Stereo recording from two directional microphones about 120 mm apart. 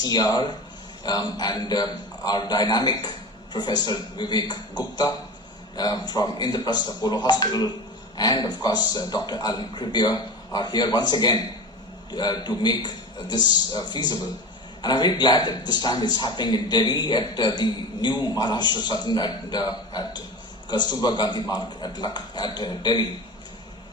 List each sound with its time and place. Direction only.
0.0 s a man's voice: 35° left (ahead or behind)